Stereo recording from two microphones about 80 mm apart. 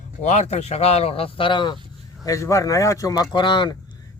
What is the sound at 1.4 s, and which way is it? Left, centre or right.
Speech, left.